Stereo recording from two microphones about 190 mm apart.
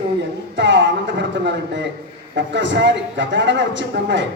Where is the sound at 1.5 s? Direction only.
65° right (ahead or behind).